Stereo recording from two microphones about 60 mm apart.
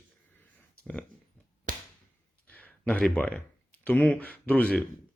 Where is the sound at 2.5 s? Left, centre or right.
Left.